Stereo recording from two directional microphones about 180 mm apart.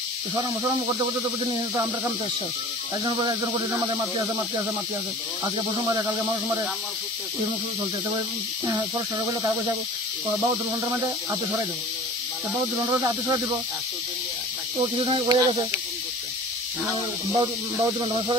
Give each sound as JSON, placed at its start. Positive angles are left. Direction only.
{"t": 3.1, "sound": "speech", "side_deg": -25}
{"t": 5.4, "sound": "speech", "side_deg": -20}
{"t": 8.6, "sound": "speech", "side_deg": -20}
{"t": 12.7, "sound": "speech", "side_deg": -20}
{"t": 14.8, "sound": "speech", "side_deg": -25}
{"t": 16.9, "sound": "speech", "side_deg": -25}